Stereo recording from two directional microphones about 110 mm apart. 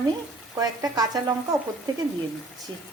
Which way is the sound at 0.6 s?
35° right (ahead or behind).